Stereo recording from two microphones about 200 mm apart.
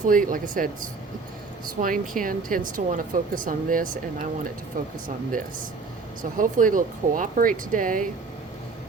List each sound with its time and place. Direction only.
0.1 s speech: 40° right (ahead or behind)
6.3 s speech: 40° right (ahead or behind)